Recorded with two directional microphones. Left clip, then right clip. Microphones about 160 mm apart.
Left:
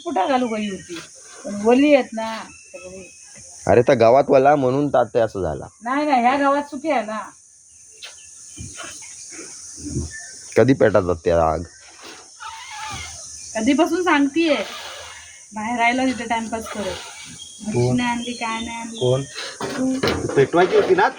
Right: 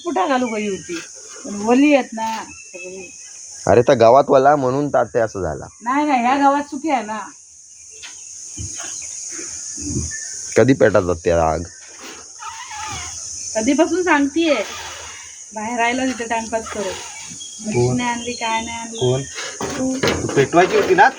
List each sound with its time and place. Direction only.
0.0 s speech: 5° left (ahead or behind)
3.6 s speech: 5° right (ahead or behind)
5.8 s a woman's voice: 20° left (ahead or behind)
10.5 s speech: 5° right (ahead or behind)
12.4 s a sound: centre (ahead or behind)
13.5 s speech: 85° left
14.6 s speech: centre (ahead or behind)
15.5 s speech: 85° left
16.6 s speech: centre (ahead or behind)
17.9 s speech: 80° left
19.4 s speech: 15° right (ahead or behind)
20.2 s speech: 50° right (ahead or behind)